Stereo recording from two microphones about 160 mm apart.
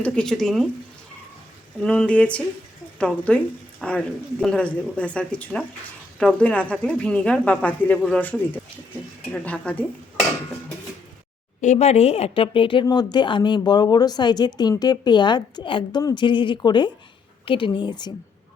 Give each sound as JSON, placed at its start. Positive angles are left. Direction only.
{"t": 0.0, "sound": "speech", "side_deg": 5}
{"t": 1.8, "sound": "a woman's voice", "side_deg": 5}
{"t": 11.6, "sound": "speech", "side_deg": 45}